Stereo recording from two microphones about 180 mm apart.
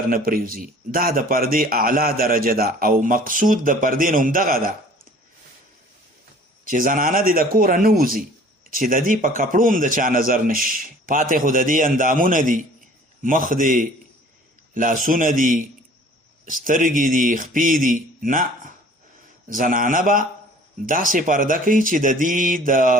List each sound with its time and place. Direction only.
0.1 s a man's voice: 50° right (ahead or behind)
6.7 s a man's voice: 50° right (ahead or behind)